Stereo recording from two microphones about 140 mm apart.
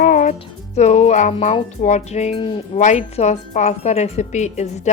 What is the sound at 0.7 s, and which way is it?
A woman's voice, 55° left (ahead or behind).